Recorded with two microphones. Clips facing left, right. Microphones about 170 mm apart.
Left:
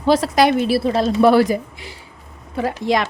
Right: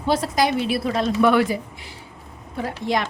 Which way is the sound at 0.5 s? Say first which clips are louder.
Left 5 dB; 35° left (ahead or behind).